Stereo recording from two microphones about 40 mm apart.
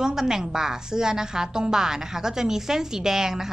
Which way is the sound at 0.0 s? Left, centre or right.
Centre.